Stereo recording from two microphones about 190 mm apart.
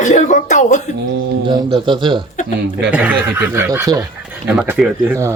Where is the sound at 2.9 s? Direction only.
5° right (ahead or behind).